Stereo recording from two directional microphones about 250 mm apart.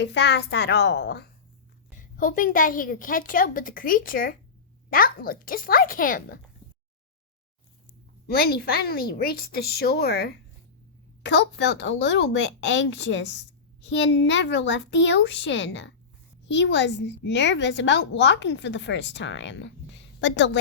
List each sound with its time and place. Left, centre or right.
0.0 s a woman's voice: left
8.3 s a woman's voice: left